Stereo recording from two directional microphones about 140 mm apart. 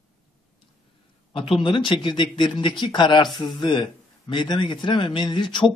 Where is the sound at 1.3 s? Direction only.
40° left (ahead or behind).